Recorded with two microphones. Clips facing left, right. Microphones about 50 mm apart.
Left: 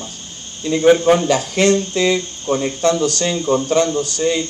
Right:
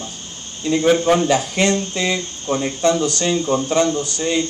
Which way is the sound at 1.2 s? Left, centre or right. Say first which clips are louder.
Left 2 dB; right.